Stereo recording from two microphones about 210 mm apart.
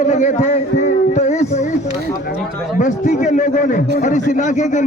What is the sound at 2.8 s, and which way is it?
A man's voice, 35° left (ahead or behind).